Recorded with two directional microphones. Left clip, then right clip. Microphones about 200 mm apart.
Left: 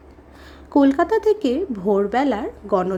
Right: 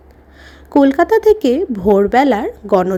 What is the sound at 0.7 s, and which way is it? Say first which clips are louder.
A woman's voice: right 6 dB; 15° right (ahead or behind).